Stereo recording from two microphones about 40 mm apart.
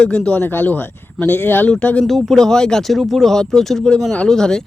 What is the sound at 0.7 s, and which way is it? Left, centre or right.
Speech, left.